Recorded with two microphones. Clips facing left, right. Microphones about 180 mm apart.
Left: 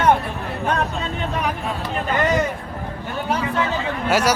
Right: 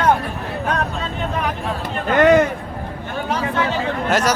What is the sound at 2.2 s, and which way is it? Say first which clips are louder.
Speech: right 8 dB; 60° right (ahead or behind).